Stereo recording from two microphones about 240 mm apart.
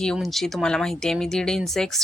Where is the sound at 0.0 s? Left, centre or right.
Centre.